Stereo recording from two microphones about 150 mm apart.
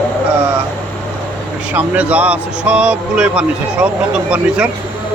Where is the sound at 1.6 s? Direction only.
10° right (ahead or behind).